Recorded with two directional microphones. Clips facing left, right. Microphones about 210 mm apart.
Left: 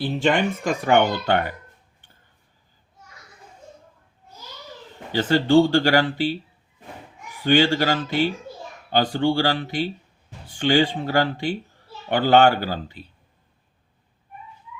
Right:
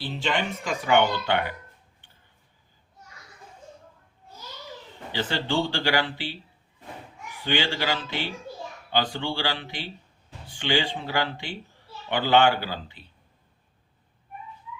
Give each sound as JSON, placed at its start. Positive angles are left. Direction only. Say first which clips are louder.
{"t": 0.0, "sound": "speech", "louder": "left 7 dB", "side_deg": 50}
{"t": 5.1, "sound": "speech", "louder": "left 10 dB", "side_deg": 45}
{"t": 7.4, "sound": "speech", "louder": "left 8 dB", "side_deg": 45}